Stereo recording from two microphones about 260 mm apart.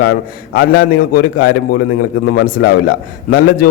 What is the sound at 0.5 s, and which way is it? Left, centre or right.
Speech, left.